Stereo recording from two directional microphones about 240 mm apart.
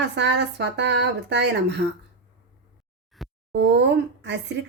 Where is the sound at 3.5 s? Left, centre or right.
Right.